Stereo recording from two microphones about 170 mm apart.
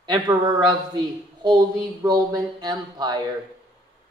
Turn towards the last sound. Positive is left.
turn(degrees=-25)  # may be behind; listen again after turning